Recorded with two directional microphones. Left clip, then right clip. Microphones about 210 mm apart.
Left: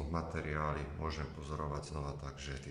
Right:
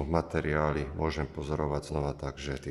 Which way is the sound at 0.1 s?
40° right (ahead or behind).